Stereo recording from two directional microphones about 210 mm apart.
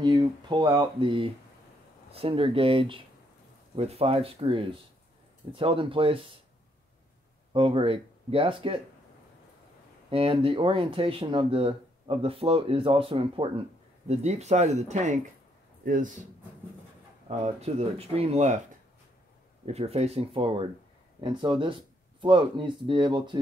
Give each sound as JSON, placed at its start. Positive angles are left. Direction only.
{"t": 0.0, "sound": "speech", "side_deg": -20}
{"t": 7.5, "sound": "speech", "side_deg": -25}
{"t": 10.0, "sound": "speech", "side_deg": -25}
{"t": 17.4, "sound": "speech", "side_deg": -30}
{"t": 19.6, "sound": "speech", "side_deg": -30}